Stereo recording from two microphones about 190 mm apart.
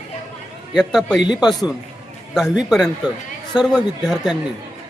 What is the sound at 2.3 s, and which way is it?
Speech, centre (ahead or behind).